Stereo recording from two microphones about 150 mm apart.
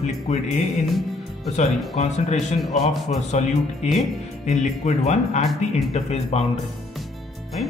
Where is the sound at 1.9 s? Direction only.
45° left (ahead or behind).